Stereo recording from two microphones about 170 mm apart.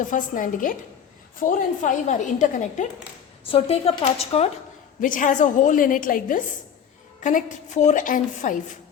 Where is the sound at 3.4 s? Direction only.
35° left (ahead or behind).